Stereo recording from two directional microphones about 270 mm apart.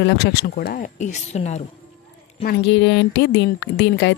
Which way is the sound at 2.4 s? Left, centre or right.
Left.